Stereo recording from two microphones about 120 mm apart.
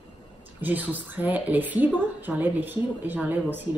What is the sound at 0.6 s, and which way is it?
A woman's voice, 15° right (ahead or behind).